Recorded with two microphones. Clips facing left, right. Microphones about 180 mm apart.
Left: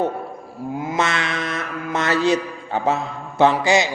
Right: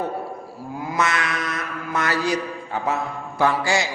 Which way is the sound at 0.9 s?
25° left (ahead or behind).